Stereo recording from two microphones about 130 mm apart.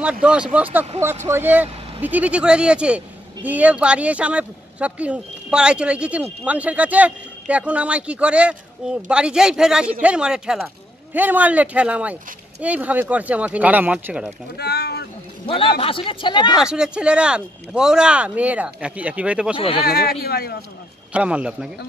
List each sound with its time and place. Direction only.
0.0 s a man's voice: 10° right (ahead or behind)
15.4 s a man's voice: 45° left (ahead or behind)
16.6 s a man's voice: 5° right (ahead or behind)
19.5 s speech: 45° left (ahead or behind)
21.1 s a man's voice: 10° right (ahead or behind)